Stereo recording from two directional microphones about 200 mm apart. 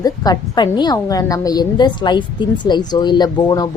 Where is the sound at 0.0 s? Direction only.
20° left (ahead or behind).